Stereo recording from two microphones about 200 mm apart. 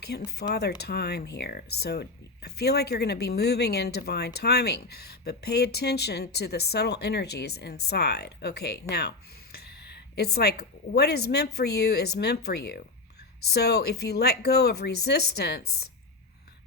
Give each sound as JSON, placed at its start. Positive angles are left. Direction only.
{"t": 0.1, "sound": "speech", "side_deg": 55}